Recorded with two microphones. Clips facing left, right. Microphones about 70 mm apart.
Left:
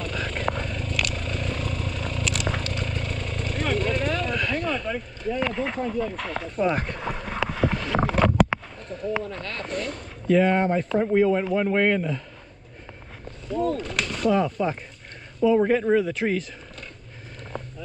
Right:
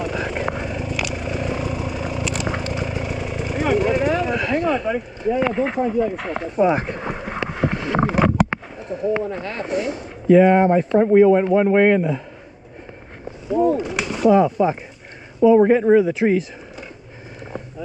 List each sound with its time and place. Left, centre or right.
0.0 s vehicle: centre
8.5 s speech: centre
13.5 s speech: centre